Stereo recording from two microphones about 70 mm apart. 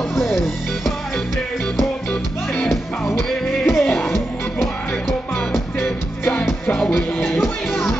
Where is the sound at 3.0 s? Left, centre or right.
Left.